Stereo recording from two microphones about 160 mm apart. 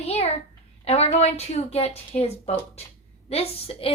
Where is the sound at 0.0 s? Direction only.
40° left (ahead or behind).